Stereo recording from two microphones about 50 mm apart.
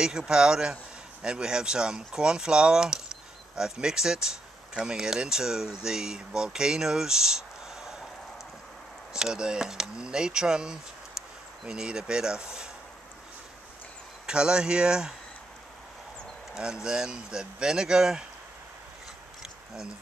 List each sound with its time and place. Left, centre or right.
0.0 s speech: centre
9.1 s speech: centre
14.2 s speech: centre
16.8 s speech: centre
19.4 s a sound: centre